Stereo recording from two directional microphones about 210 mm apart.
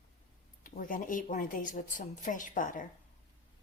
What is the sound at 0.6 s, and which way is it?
Speech, 40° left (ahead or behind).